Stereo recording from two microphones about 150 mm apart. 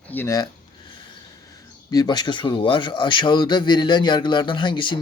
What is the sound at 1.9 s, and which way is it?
A man's voice, 25° left (ahead or behind).